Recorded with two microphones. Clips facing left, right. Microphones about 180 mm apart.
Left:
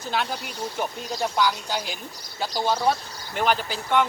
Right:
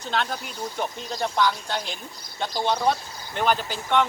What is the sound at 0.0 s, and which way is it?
Speech, 5° left (ahead or behind).